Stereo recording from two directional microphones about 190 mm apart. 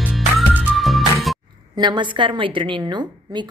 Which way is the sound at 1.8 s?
25° right (ahead or behind).